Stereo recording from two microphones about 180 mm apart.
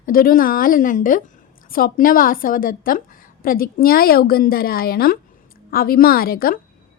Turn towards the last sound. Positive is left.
turn(degrees=55)  # may be behind; listen again after turning